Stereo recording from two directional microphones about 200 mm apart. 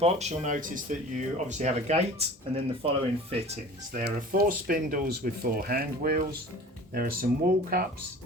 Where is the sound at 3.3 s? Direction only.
30° right (ahead or behind); by 7.3 s 45° right (ahead or behind).